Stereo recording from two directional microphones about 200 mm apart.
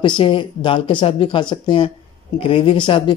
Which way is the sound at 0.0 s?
25° left (ahead or behind).